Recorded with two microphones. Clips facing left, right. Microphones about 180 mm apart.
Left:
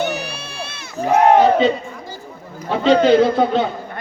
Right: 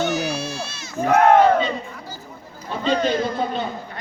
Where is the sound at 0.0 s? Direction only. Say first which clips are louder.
Right 1 dB; 60° left (ahead or behind).